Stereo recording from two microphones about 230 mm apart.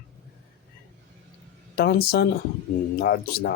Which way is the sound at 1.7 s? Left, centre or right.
Left.